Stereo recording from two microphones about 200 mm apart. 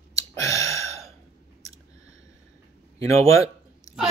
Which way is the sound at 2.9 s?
15° left (ahead or behind).